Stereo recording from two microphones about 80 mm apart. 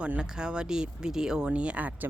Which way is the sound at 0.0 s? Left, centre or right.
Centre.